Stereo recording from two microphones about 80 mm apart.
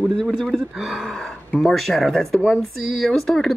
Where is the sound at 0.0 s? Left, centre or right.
Centre.